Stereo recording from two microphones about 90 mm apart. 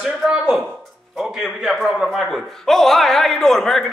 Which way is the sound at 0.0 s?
5° right (ahead or behind).